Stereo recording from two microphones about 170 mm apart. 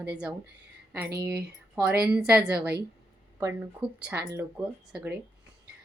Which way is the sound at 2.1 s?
5° right (ahead or behind).